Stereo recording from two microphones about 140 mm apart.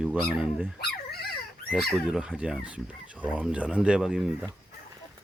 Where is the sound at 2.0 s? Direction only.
5° right (ahead or behind).